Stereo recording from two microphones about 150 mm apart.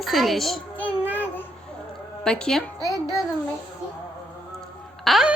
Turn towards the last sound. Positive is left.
turn(degrees=0)  # may be behind; listen again after turning